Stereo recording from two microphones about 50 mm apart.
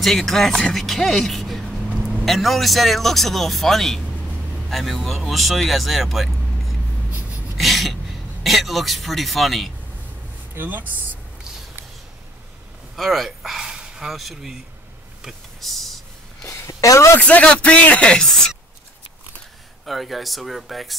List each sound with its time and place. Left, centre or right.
0.0 s speech: centre
10.5 s speech: right
12.9 s speech: centre
15.2 s a sound: centre
16.4 s a sound: left
17.2 s speech: left
19.9 s speech: centre